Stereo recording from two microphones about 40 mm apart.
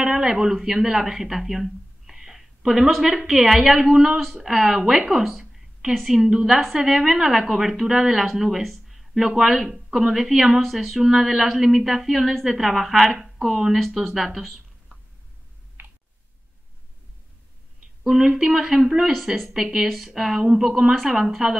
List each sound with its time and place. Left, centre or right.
0.0 s a woman's voice: centre
5.1 s a sound: centre
5.9 s a woman's voice: centre
15.8 s clicking: right
18.0 s a woman's voice: centre
20.9 s a woman's voice: centre